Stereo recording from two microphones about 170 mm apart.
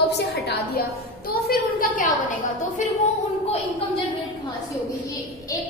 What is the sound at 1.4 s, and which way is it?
Speech, 55° left (ahead or behind).